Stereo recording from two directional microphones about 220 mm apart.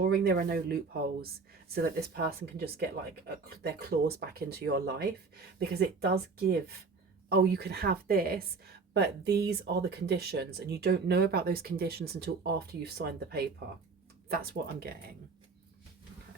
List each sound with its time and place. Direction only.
0.0 s speech: 45° right (ahead or behind)